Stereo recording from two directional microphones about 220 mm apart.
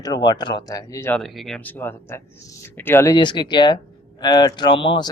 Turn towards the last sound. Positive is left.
turn(degrees=20)  # may be behind; listen again after turning